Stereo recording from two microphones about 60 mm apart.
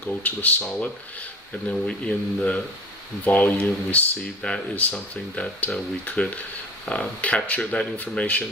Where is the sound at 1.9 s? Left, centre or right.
Centre.